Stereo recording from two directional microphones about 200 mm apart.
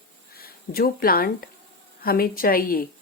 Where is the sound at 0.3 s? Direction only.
50° left (ahead or behind).